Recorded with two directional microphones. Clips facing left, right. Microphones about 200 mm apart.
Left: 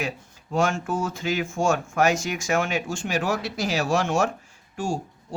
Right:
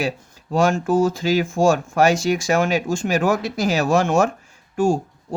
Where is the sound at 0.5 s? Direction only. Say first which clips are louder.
Right 7 dB; 35° right (ahead or behind).